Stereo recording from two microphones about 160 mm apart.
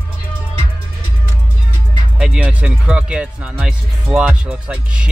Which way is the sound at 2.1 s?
5° right (ahead or behind).